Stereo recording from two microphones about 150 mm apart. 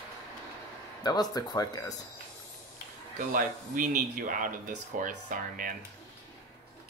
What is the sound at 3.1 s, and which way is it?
Speech, 65° right (ahead or behind).